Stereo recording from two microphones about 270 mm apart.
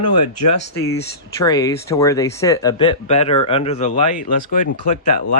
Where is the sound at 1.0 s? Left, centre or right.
Centre.